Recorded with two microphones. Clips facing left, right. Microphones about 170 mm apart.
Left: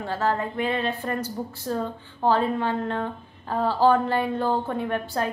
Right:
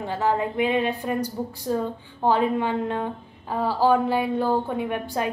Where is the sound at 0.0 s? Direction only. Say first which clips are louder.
Right 2 dB; 15° right (ahead or behind).